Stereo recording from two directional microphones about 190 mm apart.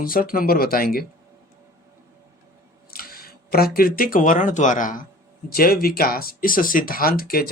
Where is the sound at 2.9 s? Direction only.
50° left (ahead or behind).